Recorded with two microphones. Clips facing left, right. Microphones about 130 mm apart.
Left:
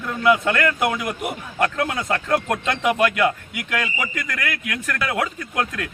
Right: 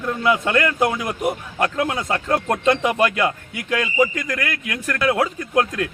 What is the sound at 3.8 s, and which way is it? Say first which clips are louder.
A man's voice: right 8 dB; 25° right (ahead or behind).